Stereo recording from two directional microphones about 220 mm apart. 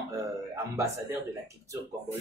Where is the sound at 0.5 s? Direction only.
15° right (ahead or behind).